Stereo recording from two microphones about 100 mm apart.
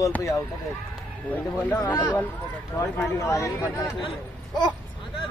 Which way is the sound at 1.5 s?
15° left (ahead or behind).